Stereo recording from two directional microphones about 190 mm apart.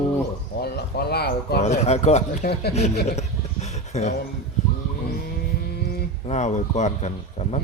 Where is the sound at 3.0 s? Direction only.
35° left (ahead or behind).